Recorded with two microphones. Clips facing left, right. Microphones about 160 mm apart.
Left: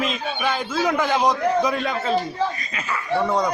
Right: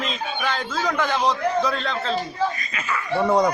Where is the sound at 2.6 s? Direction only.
30° left (ahead or behind).